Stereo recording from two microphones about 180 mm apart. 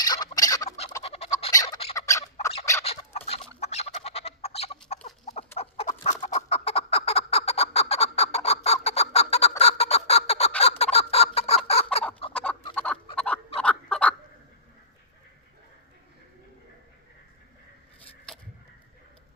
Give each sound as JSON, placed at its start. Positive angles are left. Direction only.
{"t": 0.0, "sound": "fowl", "side_deg": 20}
{"t": 0.3, "sound": "turkey", "side_deg": 20}
{"t": 1.0, "sound": "fowl", "side_deg": 35}
{"t": 1.5, "sound": "bird", "side_deg": 20}
{"t": 2.0, "sound": "squawk", "side_deg": 15}
{"t": 2.8, "sound": "turkey", "side_deg": 35}
{"t": 3.6, "sound": "bird", "side_deg": 35}
{"t": 5.5, "sound": "fowl", "side_deg": 35}
{"t": 12.3, "sound": "chicken", "side_deg": 10}
{"t": 12.7, "sound": "fowl", "side_deg": 5}